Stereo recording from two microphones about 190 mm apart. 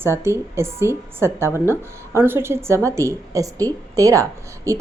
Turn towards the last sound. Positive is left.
turn(degrees=-15)  # may be behind; listen again after turning